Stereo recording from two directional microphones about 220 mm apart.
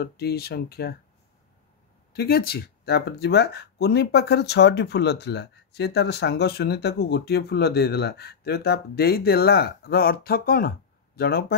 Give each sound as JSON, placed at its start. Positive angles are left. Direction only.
{"t": 0.0, "sound": "speech", "side_deg": 45}
{"t": 2.1, "sound": "speech", "side_deg": 45}